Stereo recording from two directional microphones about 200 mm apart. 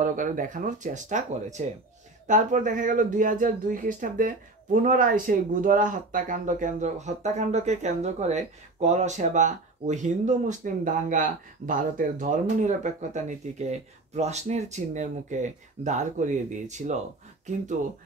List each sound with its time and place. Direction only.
0.0 s speech: 40° right (ahead or behind)